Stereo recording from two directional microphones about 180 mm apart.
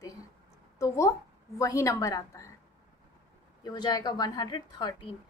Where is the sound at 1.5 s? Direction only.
15° left (ahead or behind).